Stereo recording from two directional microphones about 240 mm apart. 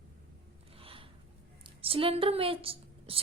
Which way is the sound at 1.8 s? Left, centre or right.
Right.